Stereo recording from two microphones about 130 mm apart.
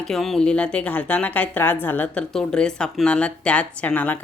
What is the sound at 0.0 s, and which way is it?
A woman's voice, centre (ahead or behind).